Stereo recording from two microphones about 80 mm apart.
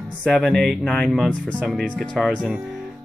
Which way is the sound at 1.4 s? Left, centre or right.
Centre.